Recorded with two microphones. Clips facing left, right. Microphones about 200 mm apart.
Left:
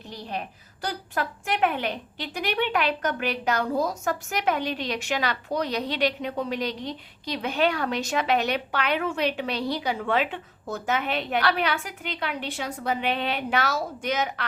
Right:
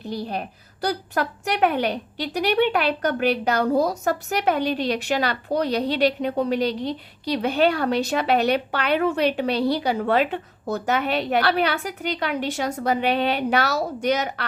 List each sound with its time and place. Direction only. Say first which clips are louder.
0.0 s speech: right 6 dB; 35° right (ahead or behind)